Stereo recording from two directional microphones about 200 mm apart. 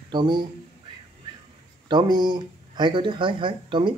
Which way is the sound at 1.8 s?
20° right (ahead or behind).